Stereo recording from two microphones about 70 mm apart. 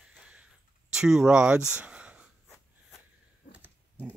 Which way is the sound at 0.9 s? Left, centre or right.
Centre.